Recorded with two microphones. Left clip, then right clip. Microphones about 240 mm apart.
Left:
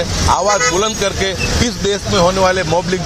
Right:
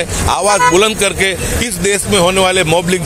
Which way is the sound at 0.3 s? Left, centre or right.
Right.